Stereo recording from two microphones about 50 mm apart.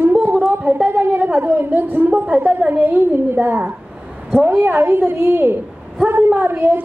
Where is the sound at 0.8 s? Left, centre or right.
Right.